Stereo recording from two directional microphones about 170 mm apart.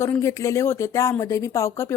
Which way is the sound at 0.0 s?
15° left (ahead or behind).